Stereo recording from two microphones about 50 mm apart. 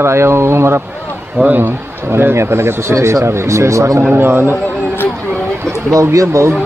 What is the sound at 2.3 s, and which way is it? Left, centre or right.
Speech, right.